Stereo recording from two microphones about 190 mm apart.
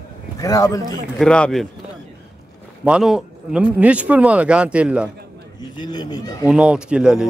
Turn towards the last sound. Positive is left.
turn(degrees=-5)  # may be behind; listen again after turning